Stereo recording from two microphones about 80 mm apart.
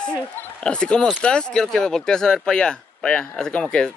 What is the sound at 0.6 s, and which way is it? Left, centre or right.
Speech, centre.